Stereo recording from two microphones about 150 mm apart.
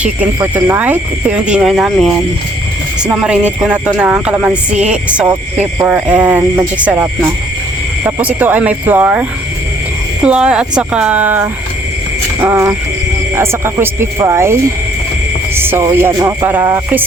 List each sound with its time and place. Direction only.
0.5 s speech: 10° right (ahead or behind)
10.2 s speech: 5° right (ahead or behind)